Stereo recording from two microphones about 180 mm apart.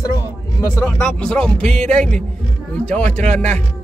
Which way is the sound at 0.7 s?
10° left (ahead or behind).